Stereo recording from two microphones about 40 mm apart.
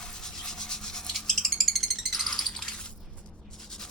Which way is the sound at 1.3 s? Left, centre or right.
Centre.